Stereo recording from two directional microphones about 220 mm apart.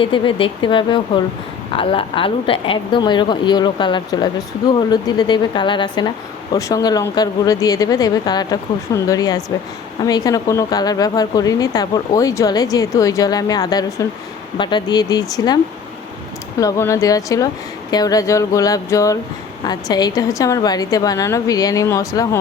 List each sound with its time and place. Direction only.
0.0 s a woman's voice: 25° left (ahead or behind)
16.6 s a woman's voice: 15° left (ahead or behind)